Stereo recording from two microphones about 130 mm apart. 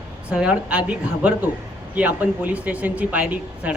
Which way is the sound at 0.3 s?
10° right (ahead or behind).